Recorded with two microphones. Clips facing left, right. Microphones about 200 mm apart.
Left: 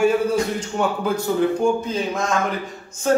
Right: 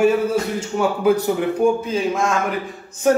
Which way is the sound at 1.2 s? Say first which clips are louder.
Right 1 dB; 20° right (ahead or behind).